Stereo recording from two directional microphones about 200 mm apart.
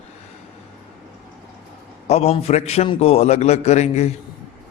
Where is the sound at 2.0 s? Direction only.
30° left (ahead or behind).